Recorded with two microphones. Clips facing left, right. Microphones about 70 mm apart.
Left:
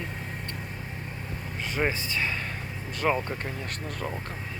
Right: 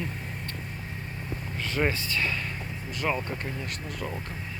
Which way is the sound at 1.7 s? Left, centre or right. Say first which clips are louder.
Right 1 dB; centre.